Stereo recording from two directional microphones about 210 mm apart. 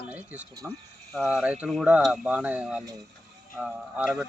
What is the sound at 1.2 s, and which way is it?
Speech, centre (ahead or behind).